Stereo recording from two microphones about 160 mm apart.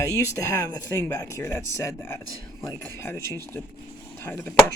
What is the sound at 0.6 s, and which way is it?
Speech, 20° left (ahead or behind).